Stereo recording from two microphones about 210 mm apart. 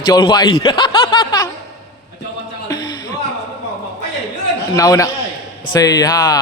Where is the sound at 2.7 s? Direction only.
20° left (ahead or behind).